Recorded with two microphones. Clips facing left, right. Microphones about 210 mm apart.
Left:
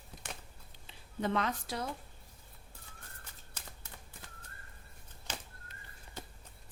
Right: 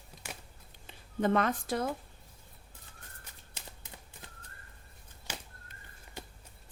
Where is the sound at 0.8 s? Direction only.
50° right (ahead or behind).